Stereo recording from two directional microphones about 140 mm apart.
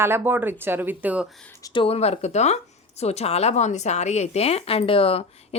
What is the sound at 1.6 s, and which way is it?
A woman's voice, 35° left (ahead or behind).